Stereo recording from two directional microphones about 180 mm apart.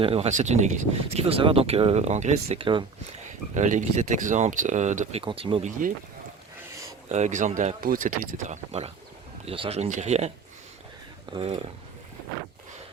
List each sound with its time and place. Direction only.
0.0 s speech: 35° right (ahead or behind)
3.5 s speech: 45° right (ahead or behind)
5.2 s speech: 30° right (ahead or behind)
7.1 s speech: 40° right (ahead or behind)
11.3 s speech: 30° right (ahead or behind)